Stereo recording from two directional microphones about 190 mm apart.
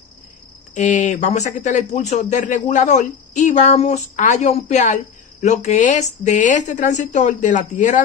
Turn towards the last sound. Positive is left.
turn(degrees=40)  # may be behind; listen again after turning